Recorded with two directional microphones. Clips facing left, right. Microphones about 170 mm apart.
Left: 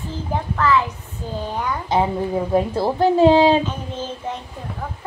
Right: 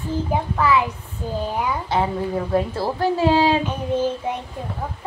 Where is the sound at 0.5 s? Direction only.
10° right (ahead or behind).